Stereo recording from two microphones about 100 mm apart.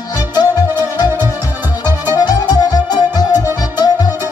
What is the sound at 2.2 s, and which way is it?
Music, 45° left (ahead or behind).